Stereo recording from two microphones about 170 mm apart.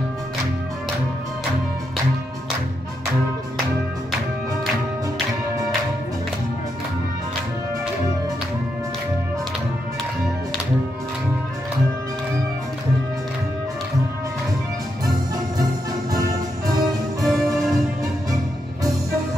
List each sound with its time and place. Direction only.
17.2 s music: centre (ahead or behind)